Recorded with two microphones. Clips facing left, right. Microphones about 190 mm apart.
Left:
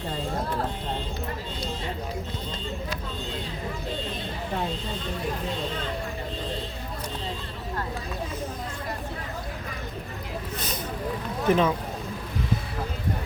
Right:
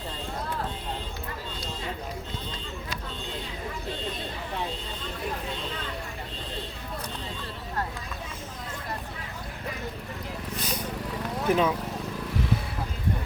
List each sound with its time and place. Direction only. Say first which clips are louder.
11.4 s speech: left 2 dB; 10° right (ahead or behind)